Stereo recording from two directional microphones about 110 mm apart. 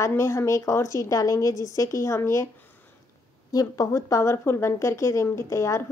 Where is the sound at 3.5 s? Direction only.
35° left (ahead or behind).